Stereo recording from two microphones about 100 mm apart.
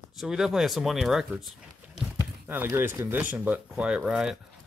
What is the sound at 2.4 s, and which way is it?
Speech, 20° right (ahead or behind).